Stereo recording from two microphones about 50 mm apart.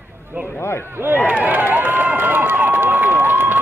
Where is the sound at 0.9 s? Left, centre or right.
Right.